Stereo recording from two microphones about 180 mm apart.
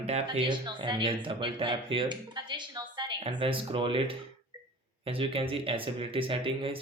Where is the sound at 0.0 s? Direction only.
30° right (ahead or behind).